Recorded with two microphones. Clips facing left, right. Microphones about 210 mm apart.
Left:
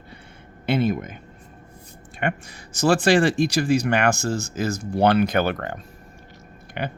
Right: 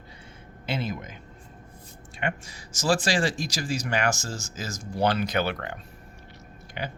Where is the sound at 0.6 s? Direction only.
60° left (ahead or behind).